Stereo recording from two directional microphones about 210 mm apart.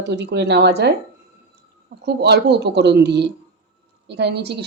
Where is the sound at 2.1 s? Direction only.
50° right (ahead or behind).